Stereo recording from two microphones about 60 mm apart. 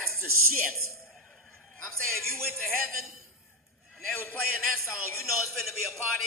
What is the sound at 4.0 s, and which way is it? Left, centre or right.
Speech, centre.